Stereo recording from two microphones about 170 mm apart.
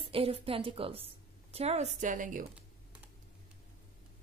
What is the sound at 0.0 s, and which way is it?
A woman's voice, 35° right (ahead or behind).